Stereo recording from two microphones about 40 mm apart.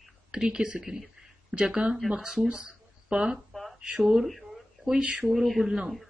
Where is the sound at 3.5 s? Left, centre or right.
Centre.